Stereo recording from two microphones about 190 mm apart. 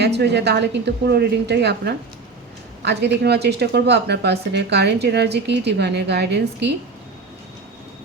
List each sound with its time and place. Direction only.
0.0 s a woman's voice: 60° right (ahead or behind)